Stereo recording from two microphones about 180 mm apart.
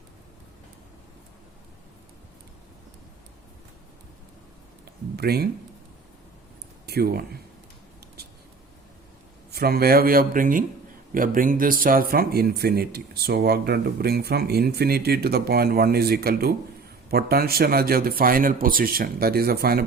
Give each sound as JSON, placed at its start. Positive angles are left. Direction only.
{"t": 5.1, "sound": "speech", "side_deg": -60}
{"t": 6.8, "sound": "speech", "side_deg": -60}
{"t": 9.5, "sound": "a man's voice", "side_deg": -55}